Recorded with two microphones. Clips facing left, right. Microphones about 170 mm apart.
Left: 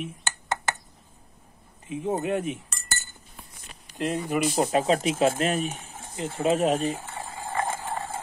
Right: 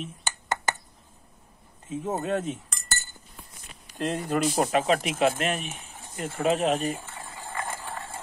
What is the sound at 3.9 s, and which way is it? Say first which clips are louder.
Speech: left 1 dB; 15° left (ahead or behind).